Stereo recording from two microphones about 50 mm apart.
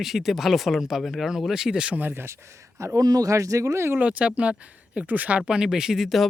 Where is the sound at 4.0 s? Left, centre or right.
Right.